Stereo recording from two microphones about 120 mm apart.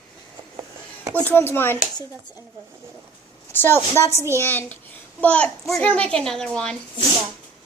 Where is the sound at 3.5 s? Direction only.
15° left (ahead or behind).